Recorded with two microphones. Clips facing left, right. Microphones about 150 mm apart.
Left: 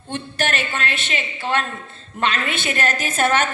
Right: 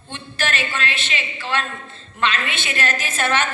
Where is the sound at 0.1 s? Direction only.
50° left (ahead or behind).